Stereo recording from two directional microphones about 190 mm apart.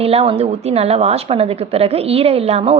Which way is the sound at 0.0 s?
30° right (ahead or behind).